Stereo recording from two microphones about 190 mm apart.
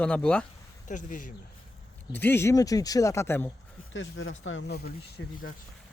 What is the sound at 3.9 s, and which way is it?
Speech, 85° left.